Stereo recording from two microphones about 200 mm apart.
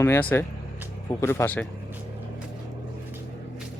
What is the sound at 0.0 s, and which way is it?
Speech, 10° left (ahead or behind).